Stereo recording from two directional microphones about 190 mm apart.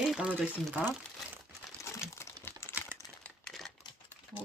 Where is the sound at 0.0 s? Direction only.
5° right (ahead or behind).